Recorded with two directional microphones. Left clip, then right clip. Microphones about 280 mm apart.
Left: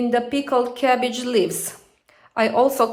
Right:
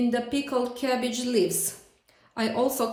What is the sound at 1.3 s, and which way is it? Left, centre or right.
Speech, centre.